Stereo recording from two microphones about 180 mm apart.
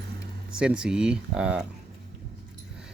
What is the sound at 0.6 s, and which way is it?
Speech, 5° right (ahead or behind).